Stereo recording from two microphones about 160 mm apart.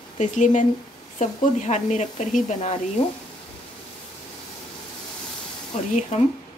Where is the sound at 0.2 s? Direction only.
50° left (ahead or behind).